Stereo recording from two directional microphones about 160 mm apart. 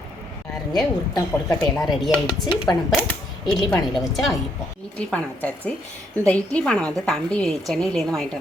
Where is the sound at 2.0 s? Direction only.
25° left (ahead or behind).